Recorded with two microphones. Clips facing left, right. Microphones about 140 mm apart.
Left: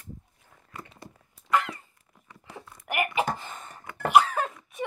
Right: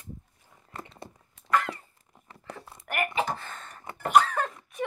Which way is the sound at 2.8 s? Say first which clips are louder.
Left 2 dB; 10° left (ahead or behind).